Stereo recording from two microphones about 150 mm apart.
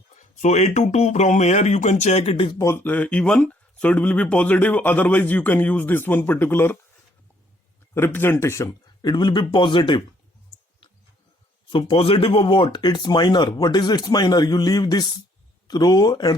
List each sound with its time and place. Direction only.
0.2 s speech: 55° left (ahead or behind); by 2.6 s 35° left (ahead or behind)
2.6 s speech: 15° left (ahead or behind)
7.9 s speech: 15° left (ahead or behind); by 10.0 s 35° left (ahead or behind)
11.7 s speech: 35° left (ahead or behind)